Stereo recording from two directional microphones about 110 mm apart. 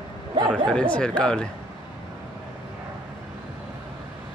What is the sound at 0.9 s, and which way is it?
Speech, 10° left (ahead or behind).